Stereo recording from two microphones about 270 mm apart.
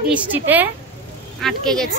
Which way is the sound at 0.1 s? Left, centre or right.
Centre.